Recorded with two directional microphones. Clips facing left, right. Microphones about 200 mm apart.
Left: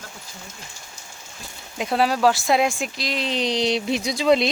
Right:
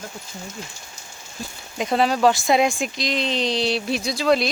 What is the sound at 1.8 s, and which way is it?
Speech, 5° left (ahead or behind).